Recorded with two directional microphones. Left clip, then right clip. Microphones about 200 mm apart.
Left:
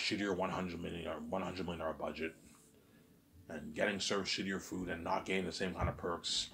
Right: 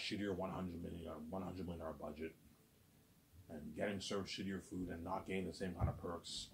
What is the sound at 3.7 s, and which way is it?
Speech, 25° left (ahead or behind).